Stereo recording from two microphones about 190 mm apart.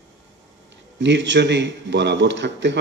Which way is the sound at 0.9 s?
70° right (ahead or behind).